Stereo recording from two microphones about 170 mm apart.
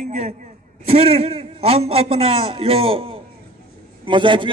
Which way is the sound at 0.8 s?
35° right (ahead or behind).